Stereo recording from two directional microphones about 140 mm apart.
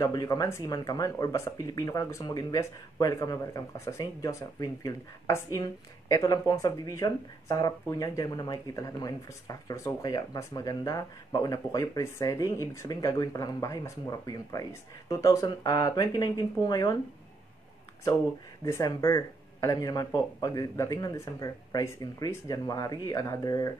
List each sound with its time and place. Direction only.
0.0 s speech: 25° left (ahead or behind)
18.7 s speech: 20° left (ahead or behind)